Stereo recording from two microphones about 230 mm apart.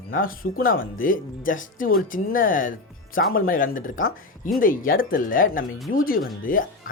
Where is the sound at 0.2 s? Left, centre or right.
Left.